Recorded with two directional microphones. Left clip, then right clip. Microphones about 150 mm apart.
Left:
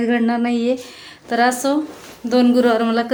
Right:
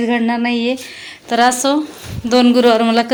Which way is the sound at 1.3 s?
10° right (ahead or behind).